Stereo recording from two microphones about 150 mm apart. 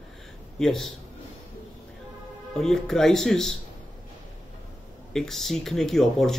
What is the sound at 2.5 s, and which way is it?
A man's voice, 5° left (ahead or behind).